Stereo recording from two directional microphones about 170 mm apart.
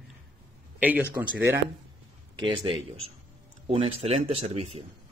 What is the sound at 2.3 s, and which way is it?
A man's voice, 30° right (ahead or behind).